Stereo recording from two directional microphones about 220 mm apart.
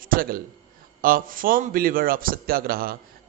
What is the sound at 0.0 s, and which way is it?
A man's voice, 40° right (ahead or behind).